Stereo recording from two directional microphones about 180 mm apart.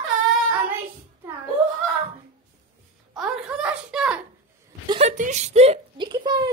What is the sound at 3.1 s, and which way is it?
A child's voice, 5° right (ahead or behind).